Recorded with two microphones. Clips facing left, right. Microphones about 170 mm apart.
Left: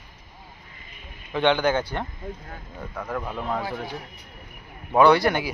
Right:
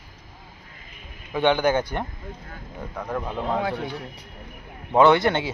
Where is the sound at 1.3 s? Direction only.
10° right (ahead or behind).